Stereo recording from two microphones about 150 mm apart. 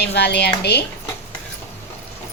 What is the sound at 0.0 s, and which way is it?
Speech, 90° left.